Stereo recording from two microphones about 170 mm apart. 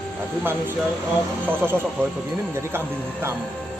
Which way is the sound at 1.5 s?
10° right (ahead or behind).